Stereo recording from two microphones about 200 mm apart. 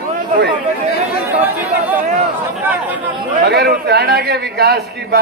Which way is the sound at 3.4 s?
55° right (ahead or behind).